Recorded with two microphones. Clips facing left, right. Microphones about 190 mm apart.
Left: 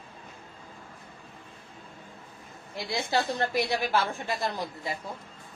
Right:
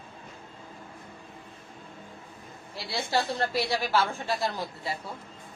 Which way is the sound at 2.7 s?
15° left (ahead or behind).